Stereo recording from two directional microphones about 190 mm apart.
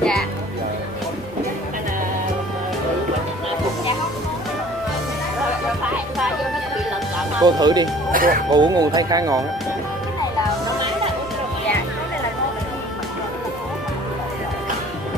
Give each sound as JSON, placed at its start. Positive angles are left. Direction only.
{"t": 7.3, "sound": "speech", "side_deg": -20}
{"t": 8.1, "sound": "speech", "side_deg": -50}
{"t": 8.5, "sound": "speech", "side_deg": -20}